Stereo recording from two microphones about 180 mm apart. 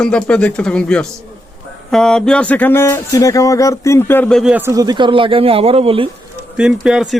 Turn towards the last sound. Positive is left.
turn(degrees=-5)  # may be behind; listen again after turning